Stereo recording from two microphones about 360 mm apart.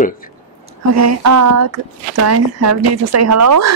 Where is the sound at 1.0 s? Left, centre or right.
Right.